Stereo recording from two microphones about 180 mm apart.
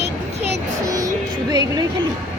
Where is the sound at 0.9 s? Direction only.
20° right (ahead or behind).